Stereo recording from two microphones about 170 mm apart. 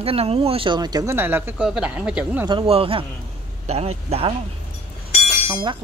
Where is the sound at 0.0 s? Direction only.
35° right (ahead or behind); by 2.4 s 10° right (ahead or behind).